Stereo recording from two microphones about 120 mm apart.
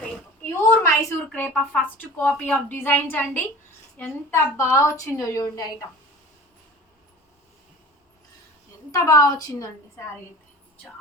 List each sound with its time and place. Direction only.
0.4 s a sound: 20° left (ahead or behind)
1.3 s a woman's voice: 10° left (ahead or behind); by 5.6 s 30° left (ahead or behind)
8.9 s a woman's voice: 30° left (ahead or behind)